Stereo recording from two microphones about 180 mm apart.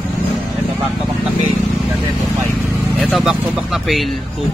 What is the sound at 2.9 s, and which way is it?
Speech, centre (ahead or behind).